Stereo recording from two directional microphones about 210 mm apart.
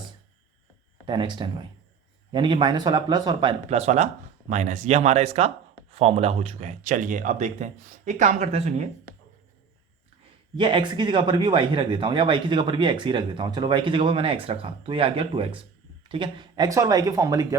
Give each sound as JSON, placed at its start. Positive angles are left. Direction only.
{"t": 1.0, "sound": "speech", "side_deg": -20}
{"t": 10.6, "sound": "speech", "side_deg": -20}